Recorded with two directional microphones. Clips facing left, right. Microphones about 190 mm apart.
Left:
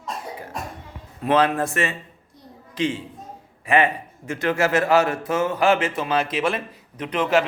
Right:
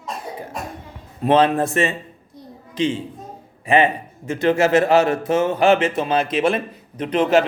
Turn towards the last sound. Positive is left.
turn(degrees=-25)  # may be behind; listen again after turning